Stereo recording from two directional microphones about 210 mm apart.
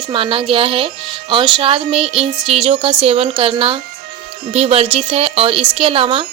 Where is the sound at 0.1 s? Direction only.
25° right (ahead or behind).